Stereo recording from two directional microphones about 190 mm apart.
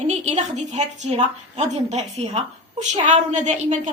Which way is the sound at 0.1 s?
35° right (ahead or behind).